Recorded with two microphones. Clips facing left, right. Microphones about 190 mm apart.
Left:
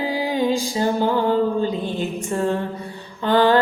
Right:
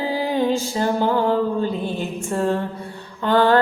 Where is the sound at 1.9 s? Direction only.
20° left (ahead or behind).